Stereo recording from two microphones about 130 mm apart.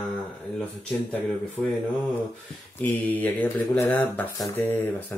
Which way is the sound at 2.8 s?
15° left (ahead or behind).